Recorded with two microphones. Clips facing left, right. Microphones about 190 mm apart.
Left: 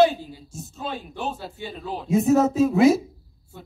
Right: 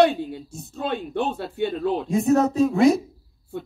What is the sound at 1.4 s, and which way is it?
Speech, 60° right (ahead or behind).